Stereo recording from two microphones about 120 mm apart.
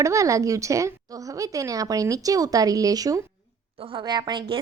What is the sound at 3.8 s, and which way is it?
Speech, 45° right (ahead or behind).